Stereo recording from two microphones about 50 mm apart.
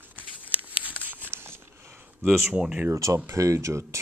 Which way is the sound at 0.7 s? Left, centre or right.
Right.